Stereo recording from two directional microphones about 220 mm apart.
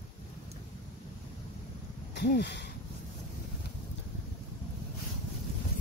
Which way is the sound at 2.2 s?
50° left (ahead or behind).